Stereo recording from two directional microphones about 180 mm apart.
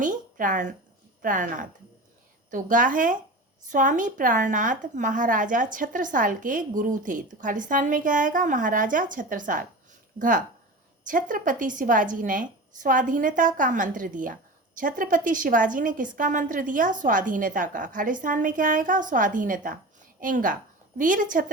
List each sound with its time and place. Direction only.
0.0 s a woman's voice: 45° right (ahead or behind)